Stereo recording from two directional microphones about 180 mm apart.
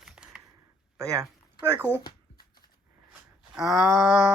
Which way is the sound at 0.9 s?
15° right (ahead or behind).